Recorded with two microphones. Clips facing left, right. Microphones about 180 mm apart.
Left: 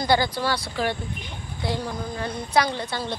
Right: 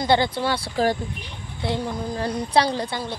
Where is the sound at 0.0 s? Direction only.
25° right (ahead or behind).